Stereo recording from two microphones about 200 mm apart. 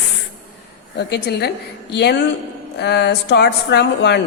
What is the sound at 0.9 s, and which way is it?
Speech, 55° left (ahead or behind).